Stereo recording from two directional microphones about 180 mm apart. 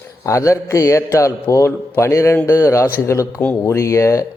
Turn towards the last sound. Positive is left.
turn(degrees=15)  # may be behind; listen again after turning